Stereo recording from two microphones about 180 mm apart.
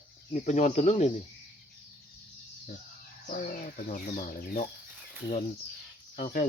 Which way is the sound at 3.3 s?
50° left (ahead or behind).